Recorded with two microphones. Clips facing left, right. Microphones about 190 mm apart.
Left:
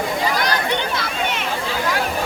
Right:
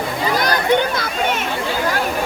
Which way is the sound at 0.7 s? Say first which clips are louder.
Right 5 dB; 45° right (ahead or behind).